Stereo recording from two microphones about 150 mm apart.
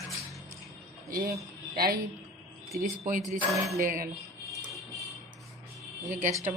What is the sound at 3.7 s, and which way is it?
Speech, 70° right (ahead or behind).